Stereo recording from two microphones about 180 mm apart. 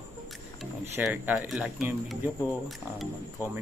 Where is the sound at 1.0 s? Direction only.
5° right (ahead or behind).